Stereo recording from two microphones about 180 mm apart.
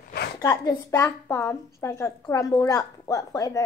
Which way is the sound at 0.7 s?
15° left (ahead or behind).